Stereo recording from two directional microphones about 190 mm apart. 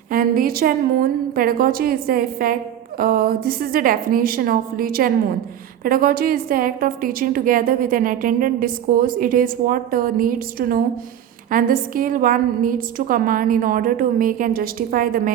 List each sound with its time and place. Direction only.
0.1 s a woman's voice: 50° right (ahead or behind)